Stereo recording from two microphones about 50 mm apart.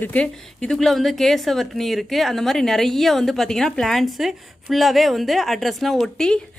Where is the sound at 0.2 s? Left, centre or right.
Left.